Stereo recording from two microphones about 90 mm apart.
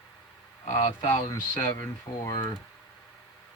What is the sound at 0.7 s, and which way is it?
Speech, 35° left (ahead or behind).